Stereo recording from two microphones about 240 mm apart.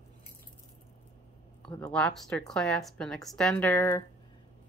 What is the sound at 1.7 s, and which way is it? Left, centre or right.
Speech, centre.